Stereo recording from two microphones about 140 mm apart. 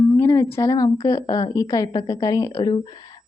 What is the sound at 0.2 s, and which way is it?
A woman's voice, 20° left (ahead or behind).